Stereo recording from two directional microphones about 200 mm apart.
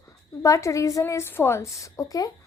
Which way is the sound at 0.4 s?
15° left (ahead or behind).